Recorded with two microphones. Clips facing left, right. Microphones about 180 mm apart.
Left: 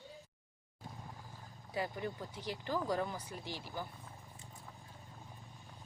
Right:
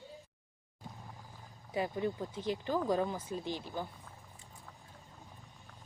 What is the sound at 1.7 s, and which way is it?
Speech, 20° right (ahead or behind).